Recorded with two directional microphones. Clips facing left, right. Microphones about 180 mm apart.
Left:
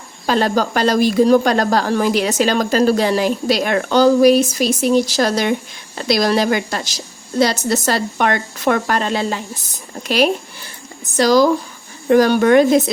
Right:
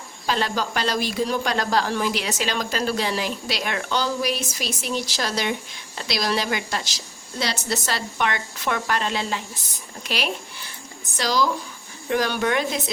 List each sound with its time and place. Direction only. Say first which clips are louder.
0.3 s speech: left 8 dB; 45° left (ahead or behind)